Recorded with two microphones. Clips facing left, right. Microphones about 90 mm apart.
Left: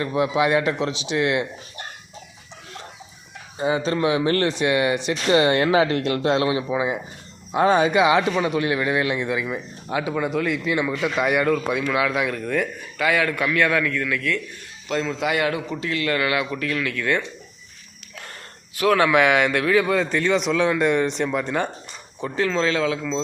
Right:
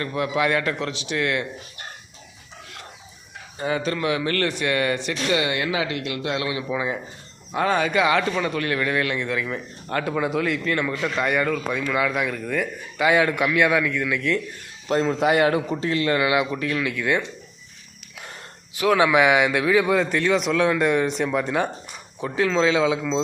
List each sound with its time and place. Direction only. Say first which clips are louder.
0.0 s speech: left 3 dB; 20° left (ahead or behind)
3.6 s speech: left 3 dB; 20° left (ahead or behind)
5.3 s speech: left 7 dB; 35° left (ahead or behind); by 10.0 s 15° left (ahead or behind)
10.0 s speech: even; centre (ahead or behind)
13.0 s a man's voice: right 2 dB; 20° right (ahead or behind)
14.8 s a man's voice: right 4 dB; 35° right (ahead or behind); by 17.2 s 15° right (ahead or behind)
18.7 s speech: even; 15° right (ahead or behind)